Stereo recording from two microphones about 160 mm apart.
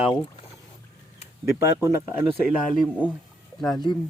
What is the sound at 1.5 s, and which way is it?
Speech, 15° right (ahead or behind).